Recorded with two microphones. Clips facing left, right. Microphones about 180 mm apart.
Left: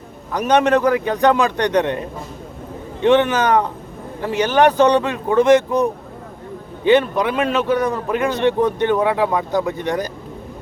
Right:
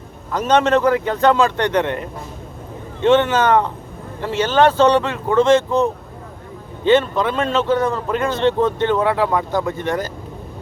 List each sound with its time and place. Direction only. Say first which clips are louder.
0.3 s a man's voice: even; 15° left (ahead or behind)